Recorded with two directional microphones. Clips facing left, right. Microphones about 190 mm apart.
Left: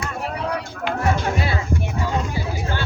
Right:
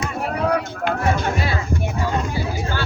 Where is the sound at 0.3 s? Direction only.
50° right (ahead or behind).